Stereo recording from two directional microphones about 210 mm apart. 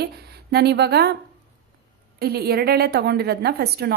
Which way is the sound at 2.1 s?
50° right (ahead or behind).